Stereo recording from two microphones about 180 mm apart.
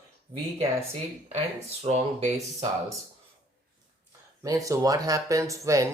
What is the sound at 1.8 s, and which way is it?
Speech, 40° right (ahead or behind).